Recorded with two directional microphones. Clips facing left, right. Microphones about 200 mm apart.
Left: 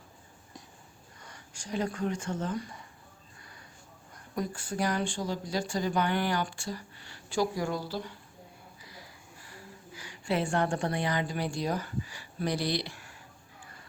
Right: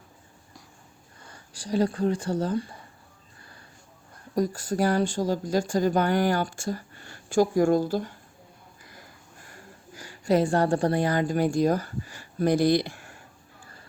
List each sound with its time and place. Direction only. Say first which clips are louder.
1.2 s speech: right 5 dB; 30° right (ahead or behind)
4.4 s speech: right 7 dB; 40° right (ahead or behind)
8.8 s a sound: right 1 dB; 50° right (ahead or behind)